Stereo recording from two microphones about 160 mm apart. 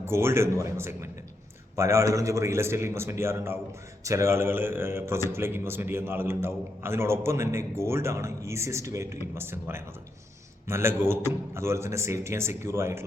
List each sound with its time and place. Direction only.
0.0 s a man's voice: 15° right (ahead or behind)